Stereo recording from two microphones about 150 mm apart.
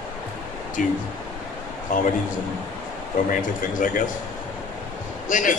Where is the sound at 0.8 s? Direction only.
65° left (ahead or behind).